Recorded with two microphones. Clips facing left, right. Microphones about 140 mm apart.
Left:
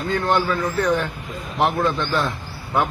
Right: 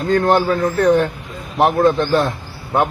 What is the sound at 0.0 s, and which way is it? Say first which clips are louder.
A man's voice: right 6 dB; 40° right (ahead or behind).